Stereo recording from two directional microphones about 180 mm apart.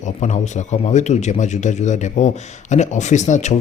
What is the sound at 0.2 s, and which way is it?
Speech, 40° left (ahead or behind).